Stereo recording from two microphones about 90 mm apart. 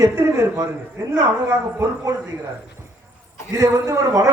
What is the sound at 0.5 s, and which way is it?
Speech, 30° right (ahead or behind).